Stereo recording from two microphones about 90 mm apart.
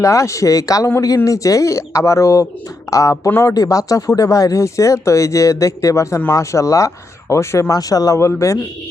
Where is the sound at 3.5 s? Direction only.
40° left (ahead or behind).